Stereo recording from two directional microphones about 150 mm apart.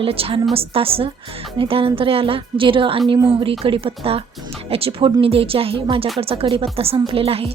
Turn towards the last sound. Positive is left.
turn(degrees=-40)  # may be behind; listen again after turning